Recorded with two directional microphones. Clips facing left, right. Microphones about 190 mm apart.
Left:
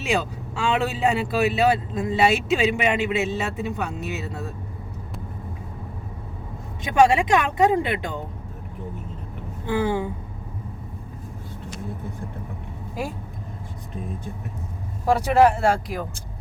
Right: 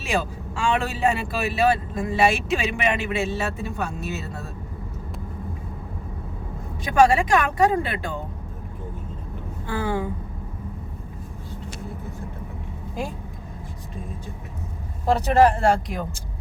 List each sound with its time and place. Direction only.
0.0 s speech: 20° left (ahead or behind)
6.8 s speech: 20° left (ahead or behind)
9.6 s speech: 15° left (ahead or behind)
15.0 s speech: 10° left (ahead or behind)